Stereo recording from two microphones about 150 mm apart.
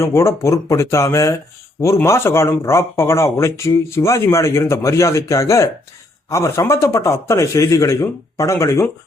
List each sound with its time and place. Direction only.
0.0 s speech: 20° left (ahead or behind)